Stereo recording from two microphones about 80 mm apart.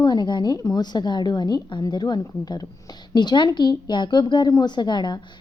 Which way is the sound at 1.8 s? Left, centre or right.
Left.